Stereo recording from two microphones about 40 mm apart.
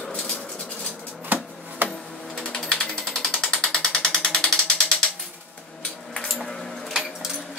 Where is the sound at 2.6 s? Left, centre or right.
Left.